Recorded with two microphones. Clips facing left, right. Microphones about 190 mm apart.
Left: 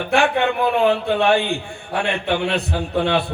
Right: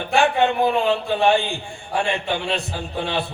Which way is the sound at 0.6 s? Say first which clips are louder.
Left 2 dB; 65° left (ahead or behind).